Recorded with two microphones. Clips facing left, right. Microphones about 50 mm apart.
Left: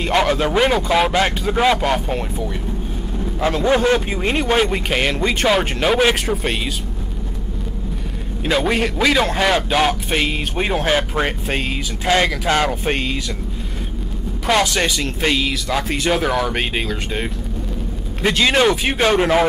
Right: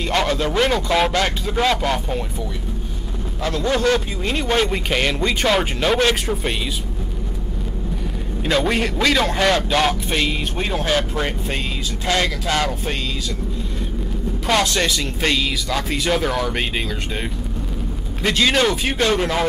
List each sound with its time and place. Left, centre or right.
0.0 s a man's voice: centre
3.3 s speech: left
4.5 s a man's voice: centre
8.5 s a man's voice: centre
14.4 s a man's voice: centre